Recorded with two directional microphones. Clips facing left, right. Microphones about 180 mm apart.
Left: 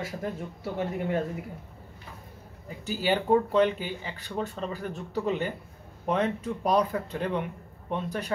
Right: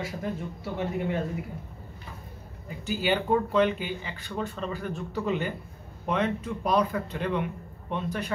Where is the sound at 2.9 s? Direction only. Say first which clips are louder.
Left 1 dB; 35° left (ahead or behind).